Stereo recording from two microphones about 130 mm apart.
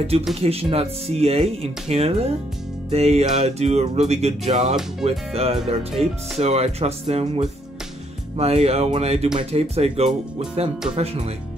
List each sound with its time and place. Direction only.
0.4 s speech: 50° right (ahead or behind)
2.9 s music: 55° right (ahead or behind)
5.3 s speech: 50° right (ahead or behind)